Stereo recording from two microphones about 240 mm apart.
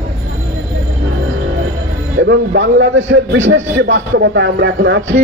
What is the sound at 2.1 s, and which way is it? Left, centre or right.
A man's voice, right.